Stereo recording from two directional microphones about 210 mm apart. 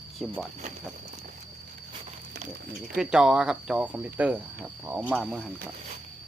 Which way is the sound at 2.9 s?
5° right (ahead or behind).